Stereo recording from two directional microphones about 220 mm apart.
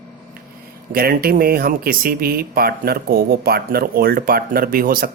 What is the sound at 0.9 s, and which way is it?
Speech, 45° right (ahead or behind).